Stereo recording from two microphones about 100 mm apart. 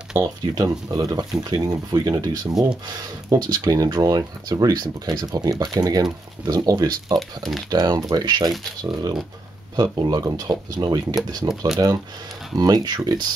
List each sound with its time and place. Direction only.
0.2 s speech: 40° right (ahead or behind)
7.2 s speech: centre (ahead or behind)
7.7 s speech: 40° right (ahead or behind)